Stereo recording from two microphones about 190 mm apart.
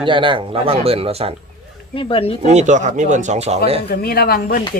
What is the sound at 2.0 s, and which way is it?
Speech, 30° left (ahead or behind).